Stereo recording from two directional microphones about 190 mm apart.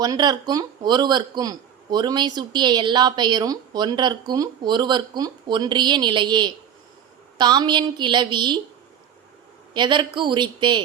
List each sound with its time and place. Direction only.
0.0 s a man's voice: 20° right (ahead or behind)
9.7 s a man's voice: 25° right (ahead or behind)